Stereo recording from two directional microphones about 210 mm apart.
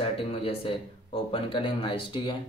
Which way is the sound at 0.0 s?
25° left (ahead or behind).